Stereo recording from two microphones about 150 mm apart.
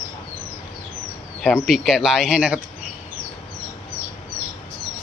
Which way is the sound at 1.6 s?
5° right (ahead or behind).